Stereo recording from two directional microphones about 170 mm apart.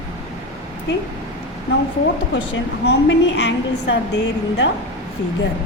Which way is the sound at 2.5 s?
90° left.